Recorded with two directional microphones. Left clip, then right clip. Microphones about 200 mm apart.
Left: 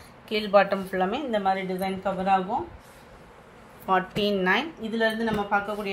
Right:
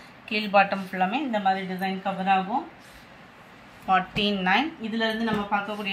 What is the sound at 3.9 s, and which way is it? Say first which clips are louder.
Speech: right 1 dB; 55° left (ahead or behind).